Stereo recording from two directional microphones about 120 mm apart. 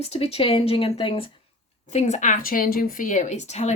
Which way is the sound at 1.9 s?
80° left.